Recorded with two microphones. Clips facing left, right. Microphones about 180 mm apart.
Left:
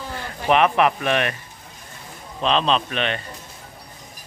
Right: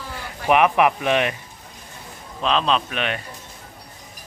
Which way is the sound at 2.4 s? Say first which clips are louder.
Left 1 dB; centre (ahead or behind).